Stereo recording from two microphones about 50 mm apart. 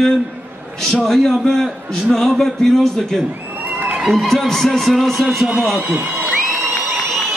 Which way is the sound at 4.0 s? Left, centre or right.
Centre.